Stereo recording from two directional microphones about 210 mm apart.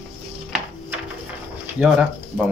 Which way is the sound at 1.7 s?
5° right (ahead or behind).